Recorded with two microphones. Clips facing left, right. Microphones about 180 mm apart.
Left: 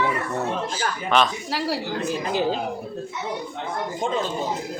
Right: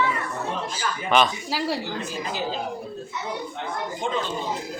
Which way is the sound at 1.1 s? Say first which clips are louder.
Right 1 dB; centre (ahead or behind).